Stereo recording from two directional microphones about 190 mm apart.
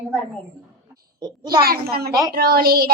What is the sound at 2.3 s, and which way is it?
Speech, 55° right (ahead or behind).